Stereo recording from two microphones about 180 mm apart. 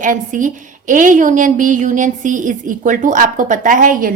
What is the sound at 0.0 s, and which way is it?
A woman's voice, 45° right (ahead or behind).